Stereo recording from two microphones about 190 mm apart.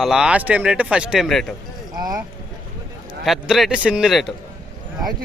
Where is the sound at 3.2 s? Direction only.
Centre (ahead or behind).